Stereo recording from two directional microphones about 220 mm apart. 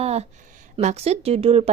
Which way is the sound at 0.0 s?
30° right (ahead or behind).